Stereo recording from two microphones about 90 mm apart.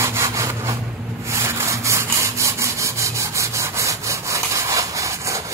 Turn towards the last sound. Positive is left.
turn(degrees=-35)  # may be behind; listen again after turning